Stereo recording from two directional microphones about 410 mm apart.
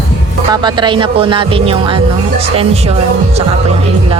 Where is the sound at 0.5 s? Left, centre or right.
Centre.